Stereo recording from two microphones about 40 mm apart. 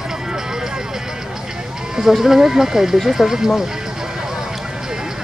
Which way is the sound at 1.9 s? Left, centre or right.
Centre.